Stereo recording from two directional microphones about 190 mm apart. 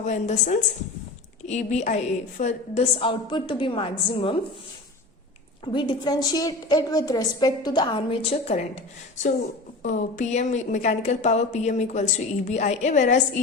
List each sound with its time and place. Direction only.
0.0 s a woman's voice: 40° left (ahead or behind)
5.6 s a woman's voice: 25° left (ahead or behind); by 13.2 s 40° left (ahead or behind)